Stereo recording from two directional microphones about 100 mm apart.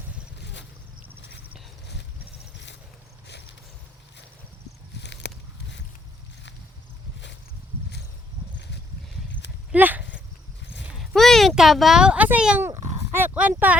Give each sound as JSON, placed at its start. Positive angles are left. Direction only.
{"t": 9.7, "sound": "horse", "side_deg": -15}
{"t": 11.0, "sound": "speech", "side_deg": 0}
{"t": 12.6, "sound": "speech", "side_deg": -20}